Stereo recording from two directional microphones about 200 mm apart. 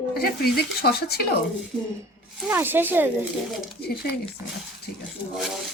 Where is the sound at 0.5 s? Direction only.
50° left (ahead or behind).